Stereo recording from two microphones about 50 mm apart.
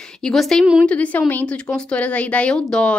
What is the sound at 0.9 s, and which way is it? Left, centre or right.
Speech, left.